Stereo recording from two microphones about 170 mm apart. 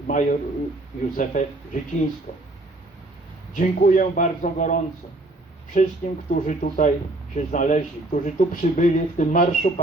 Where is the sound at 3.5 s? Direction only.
50° left (ahead or behind).